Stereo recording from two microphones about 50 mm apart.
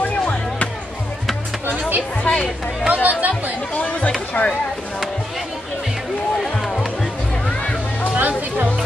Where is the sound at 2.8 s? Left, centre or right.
Right.